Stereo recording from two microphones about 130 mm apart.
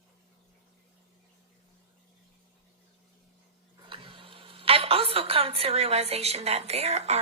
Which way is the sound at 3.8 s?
45° right (ahead or behind).